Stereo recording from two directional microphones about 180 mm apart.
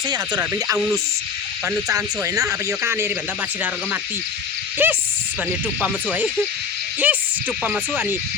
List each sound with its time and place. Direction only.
0.3 s speech: 15° right (ahead or behind)
4.8 s speech: 10° right (ahead or behind)